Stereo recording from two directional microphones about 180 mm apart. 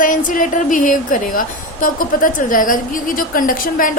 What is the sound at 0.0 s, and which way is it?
A woman's voice, 50° left (ahead or behind).